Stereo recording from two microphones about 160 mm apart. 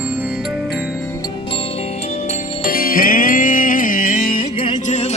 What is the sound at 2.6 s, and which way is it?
Music, 65° left (ahead or behind).